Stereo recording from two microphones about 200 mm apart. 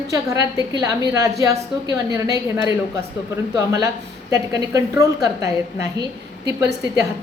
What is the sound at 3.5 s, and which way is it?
A woman's voice, 15° right (ahead or behind).